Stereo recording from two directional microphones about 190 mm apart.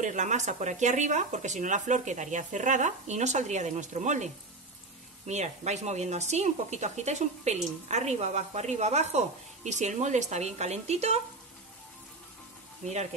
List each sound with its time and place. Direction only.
0.0 s speech: 40° right (ahead or behind)
12.8 s speech: 35° right (ahead or behind)